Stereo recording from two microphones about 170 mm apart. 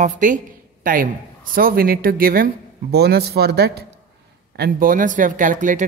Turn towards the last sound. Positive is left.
turn(degrees=-50)  # may be behind; listen again after turning